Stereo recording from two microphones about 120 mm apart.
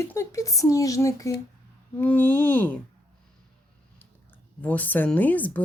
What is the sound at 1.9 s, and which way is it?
Speech, 15° left (ahead or behind).